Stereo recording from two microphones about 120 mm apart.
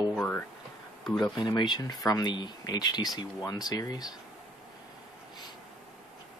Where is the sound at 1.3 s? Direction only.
35° left (ahead or behind).